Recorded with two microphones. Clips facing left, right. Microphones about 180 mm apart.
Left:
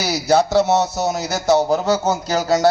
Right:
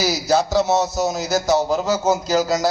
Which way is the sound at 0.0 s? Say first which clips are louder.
Left 2 dB; 65° left (ahead or behind).